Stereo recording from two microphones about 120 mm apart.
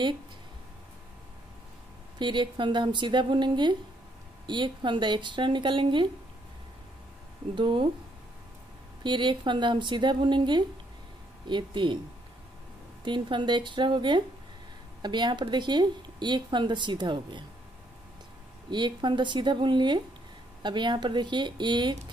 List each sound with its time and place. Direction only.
2.1 s speech: 40° right (ahead or behind)
7.5 s speech: 45° right (ahead or behind)
9.0 s speech: 40° right (ahead or behind)
13.0 s speech: 40° right (ahead or behind)
18.7 s speech: 40° right (ahead or behind)